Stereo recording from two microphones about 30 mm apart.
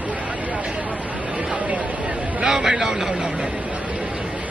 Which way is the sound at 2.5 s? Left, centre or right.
Centre.